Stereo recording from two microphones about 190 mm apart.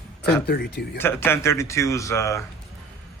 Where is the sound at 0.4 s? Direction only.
55° left (ahead or behind).